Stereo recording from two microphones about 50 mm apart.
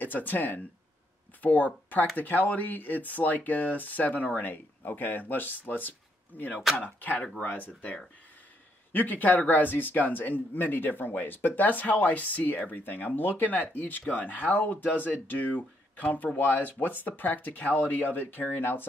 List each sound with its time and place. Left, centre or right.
0.0 s speech: left